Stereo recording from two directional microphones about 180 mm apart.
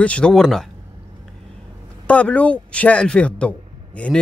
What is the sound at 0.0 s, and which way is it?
Speech, 5° left (ahead or behind).